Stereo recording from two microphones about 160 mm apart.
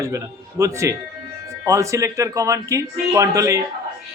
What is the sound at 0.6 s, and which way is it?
A man's voice, 20° right (ahead or behind).